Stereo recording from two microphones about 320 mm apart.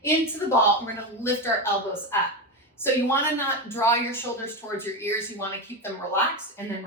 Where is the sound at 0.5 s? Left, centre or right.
Centre.